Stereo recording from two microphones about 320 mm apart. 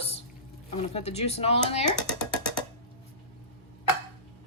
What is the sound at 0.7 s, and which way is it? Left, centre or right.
Speech, centre.